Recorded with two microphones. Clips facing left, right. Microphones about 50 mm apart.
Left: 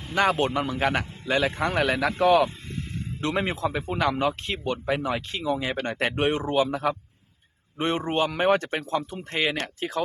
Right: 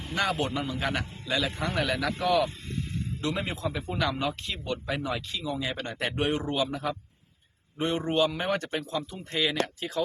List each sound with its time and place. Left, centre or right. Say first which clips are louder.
0.3 s a man's voice: left 5 dB; left
5.3 s a man's voice: left 5 dB; left
7.8 s a man's voice: left 1 dB; left